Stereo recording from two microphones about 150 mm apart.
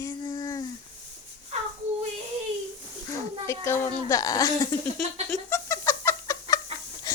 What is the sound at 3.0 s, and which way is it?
Speech, 20° left (ahead or behind).